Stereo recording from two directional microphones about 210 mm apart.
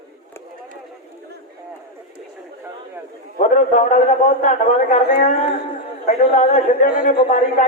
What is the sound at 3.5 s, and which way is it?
A man's voice, 35° left (ahead or behind).